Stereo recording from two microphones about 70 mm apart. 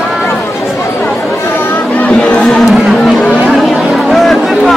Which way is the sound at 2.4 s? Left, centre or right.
Centre.